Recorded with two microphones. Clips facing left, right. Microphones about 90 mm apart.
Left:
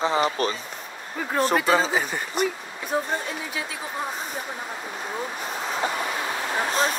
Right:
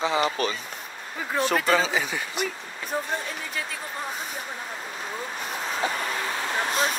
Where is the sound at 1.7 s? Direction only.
40° left (ahead or behind).